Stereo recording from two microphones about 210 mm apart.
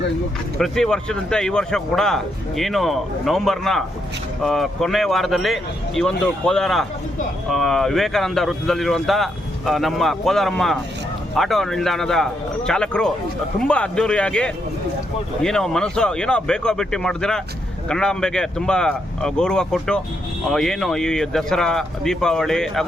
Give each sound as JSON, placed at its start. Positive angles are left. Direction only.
{"t": 0.6, "sound": "speech", "side_deg": 5}